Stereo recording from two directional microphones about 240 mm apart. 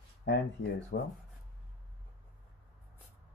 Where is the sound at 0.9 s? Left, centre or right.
Left.